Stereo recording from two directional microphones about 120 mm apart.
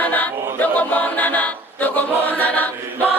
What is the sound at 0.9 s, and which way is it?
Chant, 15° left (ahead or behind).